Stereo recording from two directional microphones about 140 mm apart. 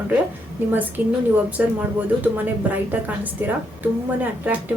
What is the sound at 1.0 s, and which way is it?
A woman's voice, 10° right (ahead or behind).